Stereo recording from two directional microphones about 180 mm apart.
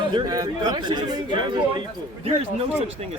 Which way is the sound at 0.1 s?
25° right (ahead or behind).